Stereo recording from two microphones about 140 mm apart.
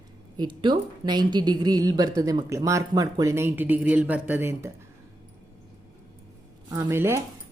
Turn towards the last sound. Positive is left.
turn(degrees=-15)  # may be behind; listen again after turning